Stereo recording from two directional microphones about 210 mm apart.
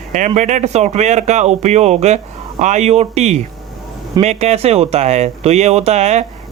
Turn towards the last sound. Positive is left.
turn(degrees=-30)  # may be behind; listen again after turning